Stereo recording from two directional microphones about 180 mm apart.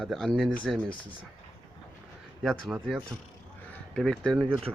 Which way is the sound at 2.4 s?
Centre (ahead or behind).